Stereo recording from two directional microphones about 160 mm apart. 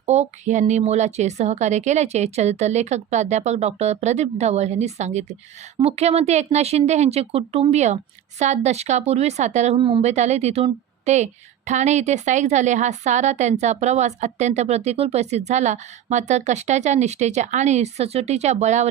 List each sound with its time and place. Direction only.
0.0 s a woman's voice: 45° right (ahead or behind)